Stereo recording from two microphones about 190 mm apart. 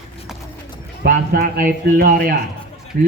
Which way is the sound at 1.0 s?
50° right (ahead or behind).